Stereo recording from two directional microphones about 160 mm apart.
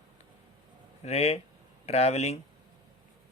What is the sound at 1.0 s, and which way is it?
Speech, 40° left (ahead or behind).